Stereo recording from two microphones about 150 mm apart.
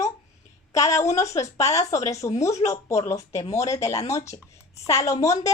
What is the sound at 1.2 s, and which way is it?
Speech, 20° left (ahead or behind).